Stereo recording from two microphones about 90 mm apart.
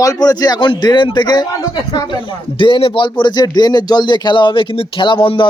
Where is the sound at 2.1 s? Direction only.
70° left (ahead or behind).